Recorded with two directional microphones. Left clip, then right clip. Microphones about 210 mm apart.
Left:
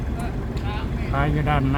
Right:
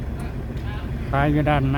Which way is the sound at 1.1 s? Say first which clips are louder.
Right 3 dB; 25° right (ahead or behind).